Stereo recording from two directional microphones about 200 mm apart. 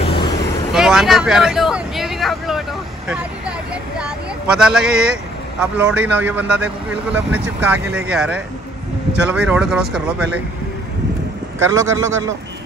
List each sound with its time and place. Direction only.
0.0 s vehicle: 25° left (ahead or behind)
0.7 s speech: centre (ahead or behind)
3.1 s vehicle: 5° right (ahead or behind)
4.0 s a sound: 5° right (ahead or behind)
5.6 s a man's voice: 5° right (ahead or behind)
11.7 s a man's voice: 15° right (ahead or behind)